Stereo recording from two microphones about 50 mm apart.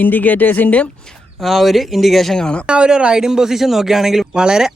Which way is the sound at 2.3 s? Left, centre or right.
Centre.